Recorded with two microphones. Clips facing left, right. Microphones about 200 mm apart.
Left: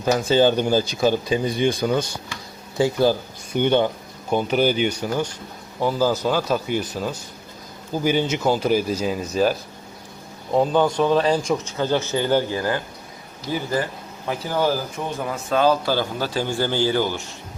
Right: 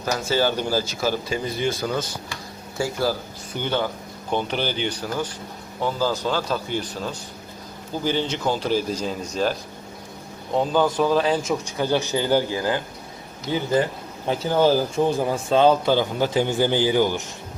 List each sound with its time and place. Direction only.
0.0 s speech: 20° left (ahead or behind)
4.3 s a man's voice: 10° left (ahead or behind); by 17.2 s 15° right (ahead or behind)